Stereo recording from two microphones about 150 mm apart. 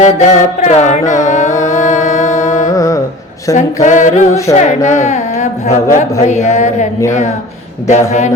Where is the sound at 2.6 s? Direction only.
20° left (ahead or behind).